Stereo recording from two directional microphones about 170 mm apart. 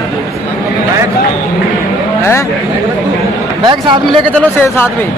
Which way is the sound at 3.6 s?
25° right (ahead or behind).